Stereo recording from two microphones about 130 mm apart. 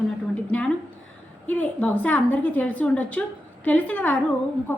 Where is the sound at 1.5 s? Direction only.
10° left (ahead or behind).